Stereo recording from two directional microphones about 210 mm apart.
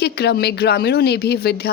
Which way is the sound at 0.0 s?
50° left (ahead or behind).